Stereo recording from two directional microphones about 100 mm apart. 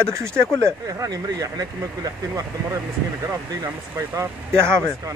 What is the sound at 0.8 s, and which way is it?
Speech, 35° right (ahead or behind).